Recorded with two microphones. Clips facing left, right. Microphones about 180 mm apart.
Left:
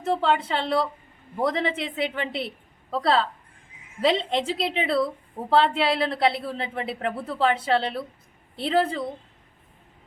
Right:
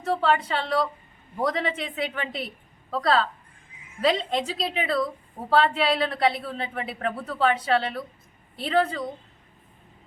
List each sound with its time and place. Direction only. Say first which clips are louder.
0.0 s a woman's voice: even; 20° left (ahead or behind)